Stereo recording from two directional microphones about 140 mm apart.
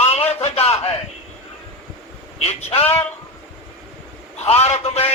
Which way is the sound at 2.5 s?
50° left (ahead or behind).